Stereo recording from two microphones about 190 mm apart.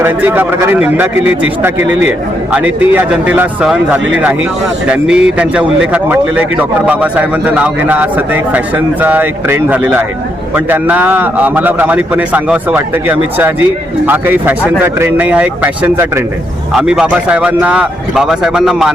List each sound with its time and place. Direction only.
0.0 s a man's voice: 10° right (ahead or behind)